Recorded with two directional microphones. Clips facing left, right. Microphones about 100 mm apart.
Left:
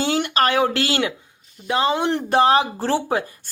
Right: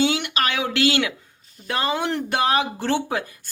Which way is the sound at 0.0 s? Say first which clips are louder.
Left 2 dB; 40° left (ahead or behind).